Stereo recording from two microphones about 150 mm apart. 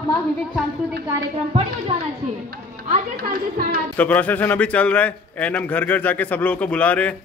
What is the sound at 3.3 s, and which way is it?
Speech, 80° right.